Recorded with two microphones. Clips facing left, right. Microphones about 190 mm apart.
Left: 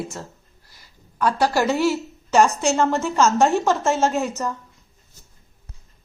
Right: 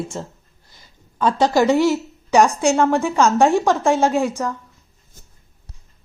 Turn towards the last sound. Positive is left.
turn(degrees=-10)  # may be behind; listen again after turning